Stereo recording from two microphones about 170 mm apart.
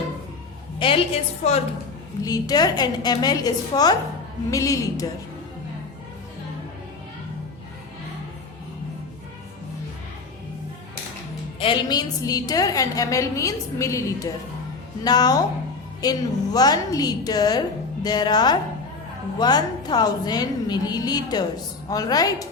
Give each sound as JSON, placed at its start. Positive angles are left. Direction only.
{"t": 0.8, "sound": "a woman's voice", "side_deg": 30}
{"t": 2.2, "sound": "a woman's voice", "side_deg": 20}
{"t": 11.6, "sound": "a woman's voice", "side_deg": 25}